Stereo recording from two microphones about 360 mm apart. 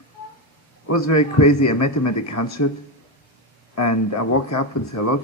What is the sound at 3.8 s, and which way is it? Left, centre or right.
Speech, left.